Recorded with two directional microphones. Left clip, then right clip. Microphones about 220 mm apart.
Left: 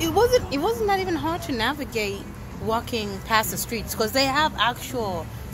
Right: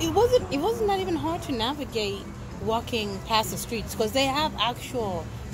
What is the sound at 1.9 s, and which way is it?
Speech, 35° left (ahead or behind).